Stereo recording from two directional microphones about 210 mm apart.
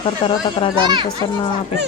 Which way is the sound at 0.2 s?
25° left (ahead or behind).